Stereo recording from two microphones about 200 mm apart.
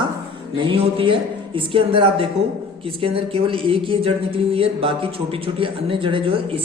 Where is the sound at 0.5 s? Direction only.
25° right (ahead or behind).